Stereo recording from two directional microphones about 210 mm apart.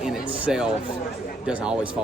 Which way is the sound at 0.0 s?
5° right (ahead or behind).